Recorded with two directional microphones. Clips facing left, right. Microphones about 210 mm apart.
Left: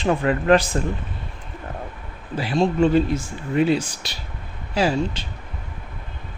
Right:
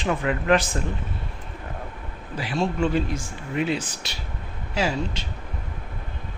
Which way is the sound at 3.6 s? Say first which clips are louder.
Left 6 dB; 35° left (ahead or behind).